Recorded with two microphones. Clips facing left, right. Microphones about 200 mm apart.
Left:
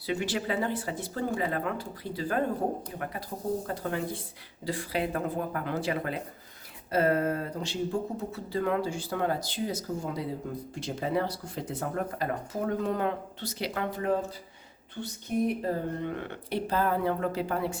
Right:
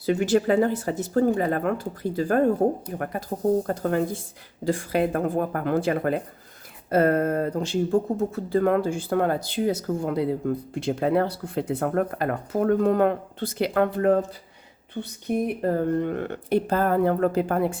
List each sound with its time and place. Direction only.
0.0 s speech: 45° right (ahead or behind)